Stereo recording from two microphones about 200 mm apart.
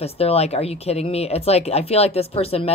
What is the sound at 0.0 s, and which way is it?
Speech, 30° left (ahead or behind).